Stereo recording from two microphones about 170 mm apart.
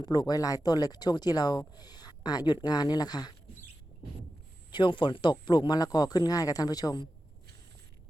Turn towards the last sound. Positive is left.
turn(degrees=25)  # may be behind; listen again after turning